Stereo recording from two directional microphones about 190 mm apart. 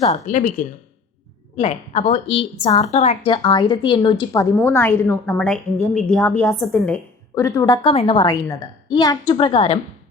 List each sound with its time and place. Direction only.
0.1 s a woman's voice: 40° left (ahead or behind); by 7.8 s 15° left (ahead or behind)
7.9 s a woman's voice: 30° left (ahead or behind)